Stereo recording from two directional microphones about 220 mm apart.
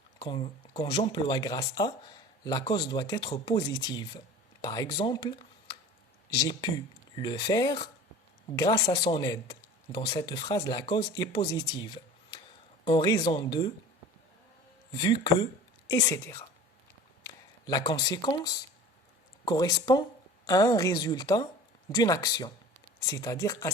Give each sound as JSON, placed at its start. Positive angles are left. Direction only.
{"t": 0.2, "sound": "a woman's voice", "side_deg": 20}
{"t": 6.4, "sound": "speech", "side_deg": 20}
{"t": 14.9, "sound": "a woman's voice", "side_deg": 20}